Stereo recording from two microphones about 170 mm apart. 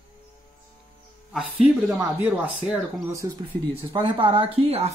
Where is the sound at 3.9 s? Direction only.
30° right (ahead or behind).